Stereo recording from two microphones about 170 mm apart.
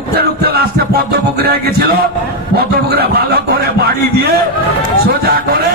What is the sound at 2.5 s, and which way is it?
Speech, 65° right (ahead or behind).